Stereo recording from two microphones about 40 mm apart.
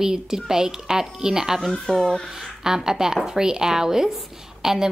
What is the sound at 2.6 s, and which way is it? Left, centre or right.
A woman's voice, centre.